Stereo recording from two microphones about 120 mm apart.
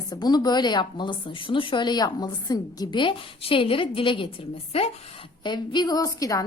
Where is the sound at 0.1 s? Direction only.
35° left (ahead or behind).